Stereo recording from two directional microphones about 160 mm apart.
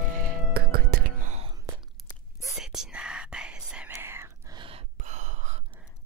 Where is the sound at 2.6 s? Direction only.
5° right (ahead or behind).